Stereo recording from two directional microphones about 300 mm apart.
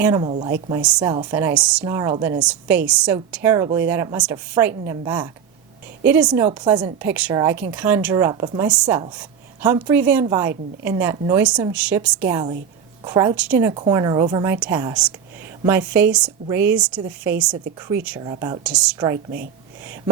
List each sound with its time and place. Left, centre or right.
0.0 s a woman's voice: centre
0.7 s a woman's voice: centre
0.9 s a woman's voice: centre